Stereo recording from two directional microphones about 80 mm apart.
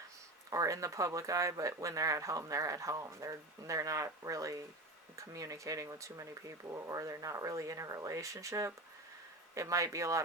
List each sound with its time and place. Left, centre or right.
0.5 s speech: right